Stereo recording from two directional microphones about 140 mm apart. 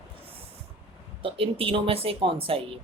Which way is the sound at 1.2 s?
40° right (ahead or behind).